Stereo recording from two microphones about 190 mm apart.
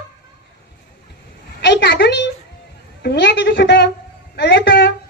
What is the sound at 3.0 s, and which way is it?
Speech, 65° left (ahead or behind).